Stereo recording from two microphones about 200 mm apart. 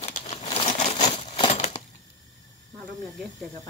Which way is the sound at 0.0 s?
30° left (ahead or behind).